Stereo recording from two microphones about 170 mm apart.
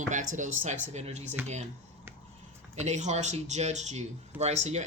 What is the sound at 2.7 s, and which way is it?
Speech, 40° right (ahead or behind).